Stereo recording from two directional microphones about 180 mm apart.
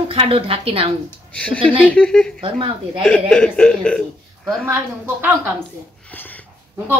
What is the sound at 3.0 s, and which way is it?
A man's voice, 5° left (ahead or behind).